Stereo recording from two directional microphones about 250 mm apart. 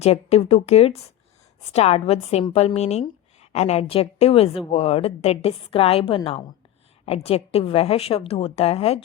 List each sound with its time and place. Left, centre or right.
0.0 s a woman's voice: left